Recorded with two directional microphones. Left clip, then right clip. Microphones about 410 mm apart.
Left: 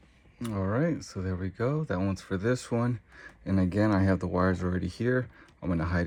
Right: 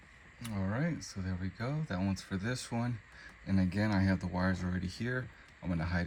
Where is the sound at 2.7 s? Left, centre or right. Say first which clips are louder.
Left 8 dB; left.